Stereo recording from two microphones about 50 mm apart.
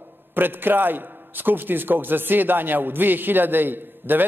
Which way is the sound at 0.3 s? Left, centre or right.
Right.